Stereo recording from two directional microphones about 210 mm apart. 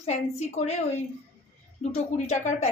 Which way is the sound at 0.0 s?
30° left (ahead or behind).